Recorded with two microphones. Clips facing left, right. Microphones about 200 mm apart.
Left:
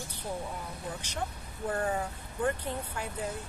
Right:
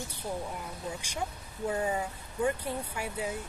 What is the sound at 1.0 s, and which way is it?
Speech, 10° right (ahead or behind).